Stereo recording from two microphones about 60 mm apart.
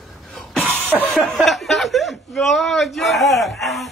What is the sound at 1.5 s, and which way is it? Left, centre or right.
Speech, centre.